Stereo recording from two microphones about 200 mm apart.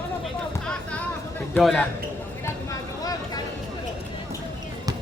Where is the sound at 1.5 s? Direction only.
5° left (ahead or behind).